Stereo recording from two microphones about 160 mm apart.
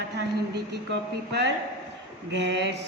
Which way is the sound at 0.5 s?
90° right.